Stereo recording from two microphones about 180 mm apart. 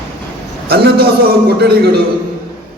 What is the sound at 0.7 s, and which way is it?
Speech, 60° right (ahead or behind).